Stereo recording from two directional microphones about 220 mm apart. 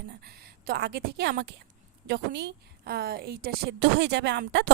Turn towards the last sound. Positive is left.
turn(degrees=-50)  # may be behind; listen again after turning